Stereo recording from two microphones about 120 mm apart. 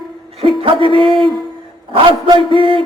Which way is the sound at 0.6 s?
45° right (ahead or behind).